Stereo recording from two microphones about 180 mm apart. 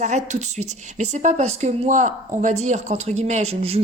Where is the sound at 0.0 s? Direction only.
40° right (ahead or behind).